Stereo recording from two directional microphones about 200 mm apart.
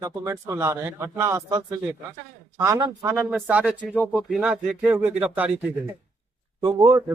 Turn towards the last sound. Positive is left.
turn(degrees=-20)  # may be behind; listen again after turning